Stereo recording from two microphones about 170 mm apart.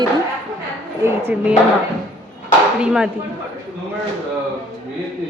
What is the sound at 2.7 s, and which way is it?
Speech, 5° right (ahead or behind).